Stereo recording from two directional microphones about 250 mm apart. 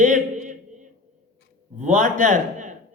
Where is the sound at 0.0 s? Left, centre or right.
Right.